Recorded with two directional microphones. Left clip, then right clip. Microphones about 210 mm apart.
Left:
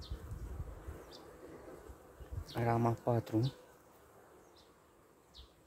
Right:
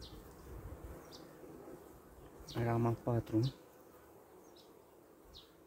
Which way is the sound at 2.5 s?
20° left (ahead or behind).